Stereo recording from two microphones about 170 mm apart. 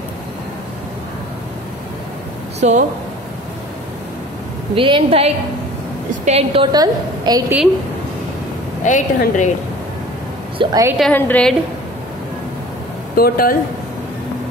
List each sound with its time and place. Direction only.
2.6 s speech: 45° right (ahead or behind)
4.7 s a woman's voice: 30° right (ahead or behind)
8.8 s a woman's voice: 45° left (ahead or behind)
10.6 s a woman's voice: 25° right (ahead or behind)
11.0 s a woman's voice: 10° left (ahead or behind)
13.1 s speech: 60° left (ahead or behind)